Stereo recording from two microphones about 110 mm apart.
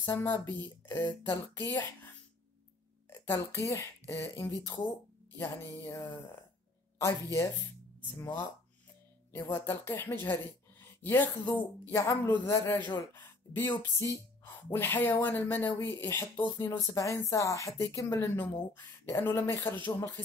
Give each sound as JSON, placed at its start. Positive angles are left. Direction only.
{"t": 0.0, "sound": "speech", "side_deg": 20}
{"t": 3.1, "sound": "a woman's voice", "side_deg": 20}
{"t": 5.8, "sound": "speech", "side_deg": 20}